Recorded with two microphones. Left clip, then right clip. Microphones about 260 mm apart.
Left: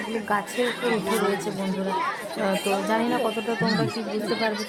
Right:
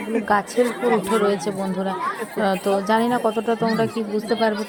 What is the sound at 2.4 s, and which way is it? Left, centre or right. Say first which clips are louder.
Speech: right 4 dB; centre.